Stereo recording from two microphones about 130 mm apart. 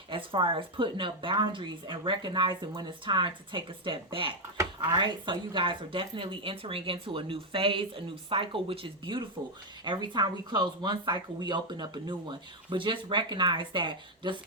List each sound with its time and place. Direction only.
0.1 s speech: 40° right (ahead or behind)